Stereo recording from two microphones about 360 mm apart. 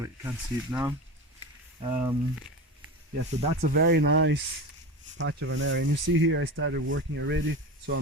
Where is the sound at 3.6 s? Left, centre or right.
Right.